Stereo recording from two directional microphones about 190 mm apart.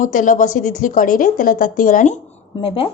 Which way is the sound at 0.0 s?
45° left (ahead or behind).